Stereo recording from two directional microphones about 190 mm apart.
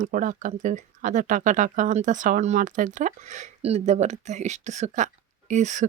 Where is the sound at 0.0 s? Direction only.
45° right (ahead or behind).